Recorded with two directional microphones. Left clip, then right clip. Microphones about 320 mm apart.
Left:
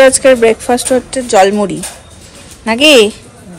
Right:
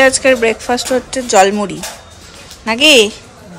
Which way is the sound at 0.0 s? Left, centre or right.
Centre.